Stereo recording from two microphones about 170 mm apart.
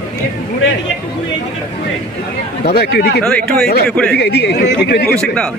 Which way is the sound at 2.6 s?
70° left (ahead or behind).